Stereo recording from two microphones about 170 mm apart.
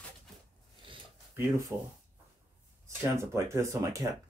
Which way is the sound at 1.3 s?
15° right (ahead or behind).